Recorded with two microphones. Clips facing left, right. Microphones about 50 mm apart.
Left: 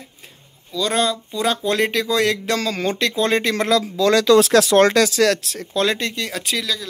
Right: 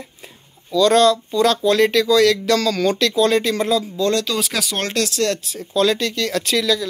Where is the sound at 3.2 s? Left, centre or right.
Left.